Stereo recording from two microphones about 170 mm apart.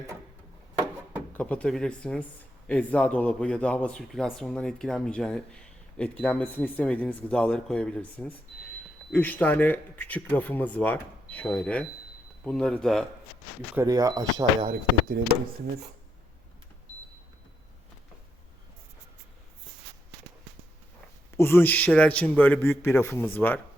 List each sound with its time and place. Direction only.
1.3 s speech: 10° left (ahead or behind)
13.8 s speech: 20° right (ahead or behind)
15.2 s speech: 80° right
21.3 s speech: 15° left (ahead or behind)